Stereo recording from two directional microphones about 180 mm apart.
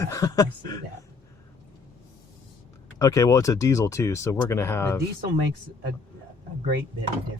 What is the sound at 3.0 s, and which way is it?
Speech, 20° left (ahead or behind).